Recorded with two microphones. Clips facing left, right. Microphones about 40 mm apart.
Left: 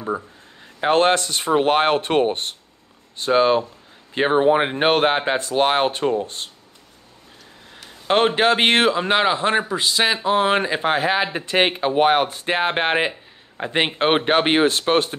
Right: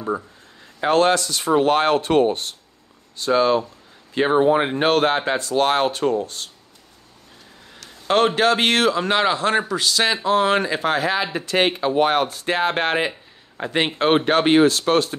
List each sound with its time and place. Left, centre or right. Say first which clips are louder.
0.7 s speech: even; left
7.7 s a sound: even; left
8.4 s speech: left 1 dB; left